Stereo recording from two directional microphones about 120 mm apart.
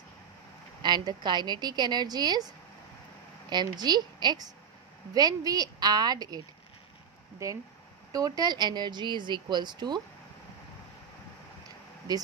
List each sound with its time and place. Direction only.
0.8 s speech: 40° right (ahead or behind)
12.1 s speech: 35° right (ahead or behind)